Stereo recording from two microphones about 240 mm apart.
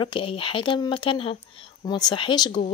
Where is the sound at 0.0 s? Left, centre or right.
Left.